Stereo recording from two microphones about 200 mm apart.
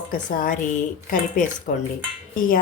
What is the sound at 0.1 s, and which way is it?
Speech, 45° left (ahead or behind).